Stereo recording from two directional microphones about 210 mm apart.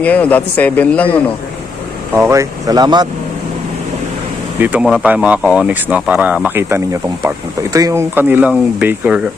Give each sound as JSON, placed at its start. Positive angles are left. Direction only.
{"t": 0.0, "sound": "a man's voice", "side_deg": 5}
{"t": 2.1, "sound": "speech", "side_deg": -15}
{"t": 4.6, "sound": "speech", "side_deg": -5}